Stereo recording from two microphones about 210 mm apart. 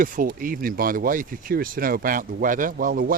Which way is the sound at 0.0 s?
40° right (ahead or behind).